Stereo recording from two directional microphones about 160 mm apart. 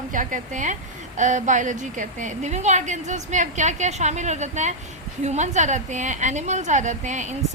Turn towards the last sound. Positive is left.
turn(degrees=-50)  # may be behind; listen again after turning